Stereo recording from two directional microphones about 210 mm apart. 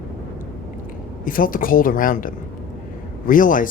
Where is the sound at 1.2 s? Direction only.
40° left (ahead or behind).